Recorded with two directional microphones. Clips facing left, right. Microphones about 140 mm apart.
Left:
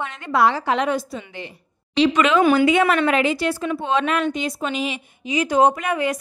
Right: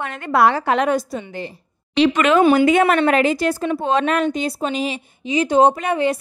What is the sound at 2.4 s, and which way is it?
Speech, 25° right (ahead or behind).